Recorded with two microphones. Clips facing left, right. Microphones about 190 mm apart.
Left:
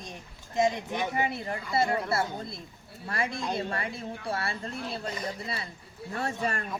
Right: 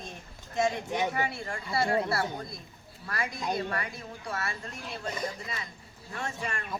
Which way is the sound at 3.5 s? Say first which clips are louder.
Left 1 dB; 30° left (ahead or behind).